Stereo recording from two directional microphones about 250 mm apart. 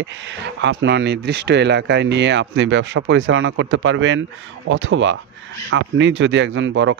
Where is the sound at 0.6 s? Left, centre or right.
Right.